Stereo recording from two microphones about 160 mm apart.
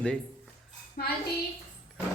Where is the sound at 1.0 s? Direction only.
75° left (ahead or behind).